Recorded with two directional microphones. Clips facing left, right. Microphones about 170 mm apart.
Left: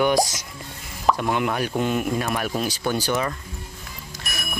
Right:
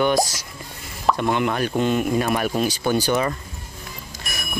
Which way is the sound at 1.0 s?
5° left (ahead or behind).